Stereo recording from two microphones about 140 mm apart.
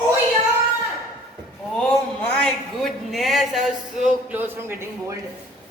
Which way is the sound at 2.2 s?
5° left (ahead or behind).